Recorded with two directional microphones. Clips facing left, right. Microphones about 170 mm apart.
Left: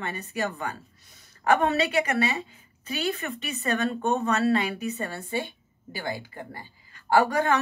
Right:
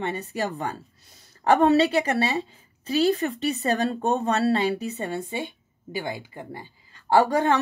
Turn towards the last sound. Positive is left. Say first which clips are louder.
# right 2 dB
turn(degrees=-30)  # may be behind; listen again after turning